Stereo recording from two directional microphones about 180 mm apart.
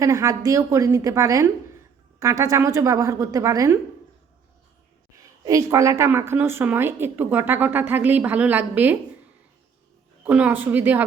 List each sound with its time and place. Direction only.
0.0 s a woman's voice: 15° right (ahead or behind)
5.1 s a woman's voice: 20° right (ahead or behind)
10.2 s a woman's voice: 10° right (ahead or behind)